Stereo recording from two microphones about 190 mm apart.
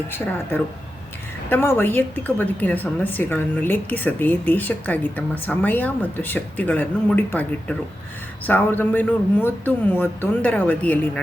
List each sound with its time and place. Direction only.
0.1 s a woman's voice: 10° left (ahead or behind)